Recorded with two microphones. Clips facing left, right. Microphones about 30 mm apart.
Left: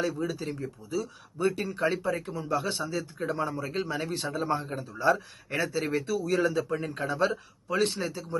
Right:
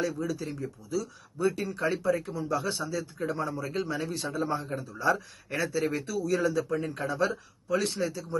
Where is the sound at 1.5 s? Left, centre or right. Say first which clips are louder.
Left 1 dB; left.